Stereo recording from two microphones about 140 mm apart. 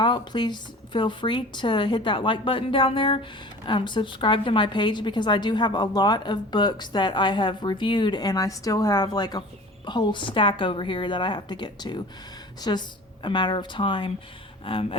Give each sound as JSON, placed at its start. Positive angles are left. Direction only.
{"t": 0.0, "sound": "a woman's voice", "side_deg": 30}